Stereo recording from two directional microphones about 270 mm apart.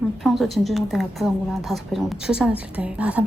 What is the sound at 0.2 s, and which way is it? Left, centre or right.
A woman's voice, centre.